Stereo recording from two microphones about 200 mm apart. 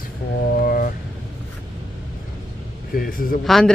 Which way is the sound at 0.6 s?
45° left (ahead or behind).